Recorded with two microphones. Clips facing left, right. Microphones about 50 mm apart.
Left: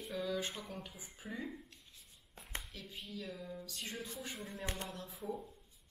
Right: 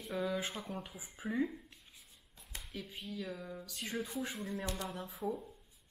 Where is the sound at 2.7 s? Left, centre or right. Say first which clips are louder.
Right 4 dB; centre.